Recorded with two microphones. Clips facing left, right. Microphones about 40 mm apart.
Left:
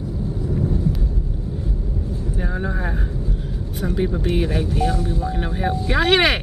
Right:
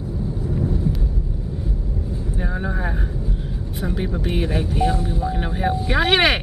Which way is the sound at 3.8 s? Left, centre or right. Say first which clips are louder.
Left 3 dB; centre.